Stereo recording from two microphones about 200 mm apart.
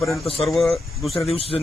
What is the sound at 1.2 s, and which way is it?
Speech, 30° left (ahead or behind).